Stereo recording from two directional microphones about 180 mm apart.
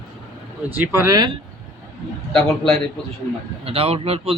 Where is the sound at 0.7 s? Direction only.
10° right (ahead or behind).